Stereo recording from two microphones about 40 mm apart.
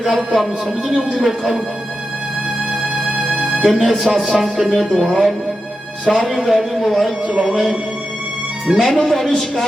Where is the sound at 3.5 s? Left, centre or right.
Centre.